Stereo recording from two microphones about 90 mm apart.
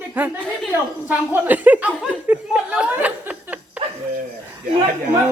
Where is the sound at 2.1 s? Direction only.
15° right (ahead or behind).